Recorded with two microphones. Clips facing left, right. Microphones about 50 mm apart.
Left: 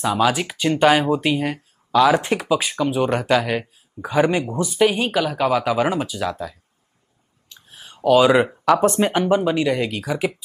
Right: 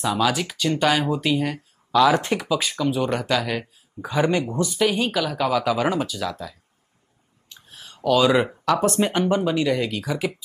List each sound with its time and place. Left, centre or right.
0.0 s speech: left
7.7 s a sound: centre
8.6 s speech: left